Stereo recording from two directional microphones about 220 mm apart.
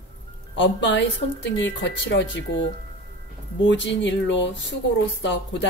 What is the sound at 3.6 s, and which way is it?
Speech, 55° left (ahead or behind).